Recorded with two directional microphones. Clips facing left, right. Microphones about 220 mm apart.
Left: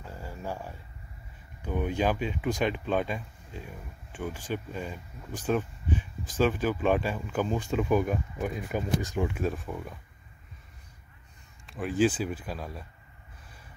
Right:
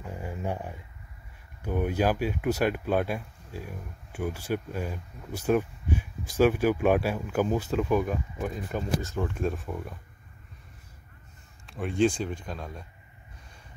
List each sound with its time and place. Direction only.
0.0 s a sound: 15° right (ahead or behind)
1.6 s speech: 10° right (ahead or behind)
11.6 s speech: centre (ahead or behind)